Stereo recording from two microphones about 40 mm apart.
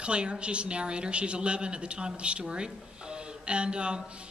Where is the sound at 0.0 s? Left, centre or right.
Right.